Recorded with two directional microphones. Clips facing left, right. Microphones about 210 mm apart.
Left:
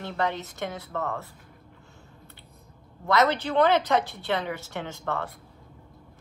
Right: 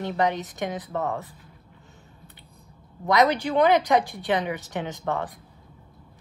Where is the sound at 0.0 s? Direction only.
15° right (ahead or behind).